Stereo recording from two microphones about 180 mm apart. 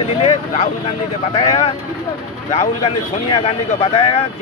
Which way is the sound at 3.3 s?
30° left (ahead or behind).